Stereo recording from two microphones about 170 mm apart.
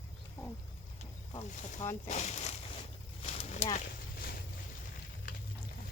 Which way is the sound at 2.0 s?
45° left (ahead or behind).